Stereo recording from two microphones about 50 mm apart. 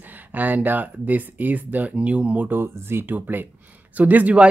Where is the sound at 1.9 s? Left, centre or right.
Right.